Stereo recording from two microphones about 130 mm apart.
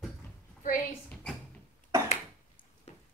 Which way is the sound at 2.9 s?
60° left (ahead or behind).